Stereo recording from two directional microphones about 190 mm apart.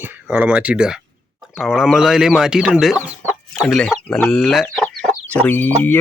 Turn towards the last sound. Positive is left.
turn(degrees=10)  # may be behind; listen again after turning